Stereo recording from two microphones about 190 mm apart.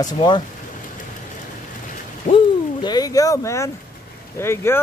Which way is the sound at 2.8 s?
20° left (ahead or behind).